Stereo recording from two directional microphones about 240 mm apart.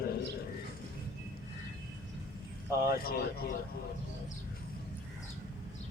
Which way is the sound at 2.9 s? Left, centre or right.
Left.